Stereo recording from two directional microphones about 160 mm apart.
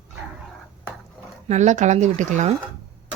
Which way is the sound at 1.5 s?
50° right (ahead or behind).